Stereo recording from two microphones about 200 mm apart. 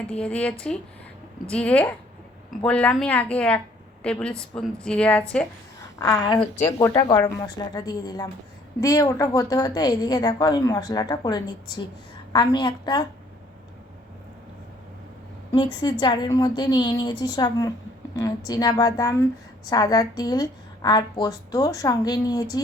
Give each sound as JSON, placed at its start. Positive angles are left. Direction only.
{"t": 0.1, "sound": "a woman's voice", "side_deg": 5}
{"t": 6.1, "sound": "a woman's voice", "side_deg": 20}
{"t": 15.5, "sound": "a woman's voice", "side_deg": 20}